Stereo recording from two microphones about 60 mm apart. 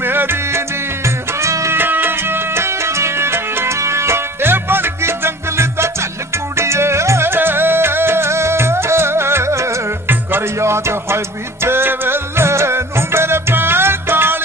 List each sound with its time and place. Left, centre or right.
0.0 s music: right
1.8 s music: right